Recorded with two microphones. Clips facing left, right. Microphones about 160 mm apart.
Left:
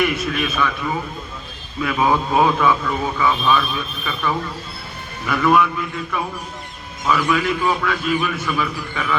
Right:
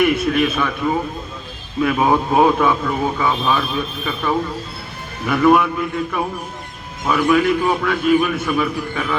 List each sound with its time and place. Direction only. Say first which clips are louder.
0.0 s a man's voice: right 5 dB; 55° right (ahead or behind)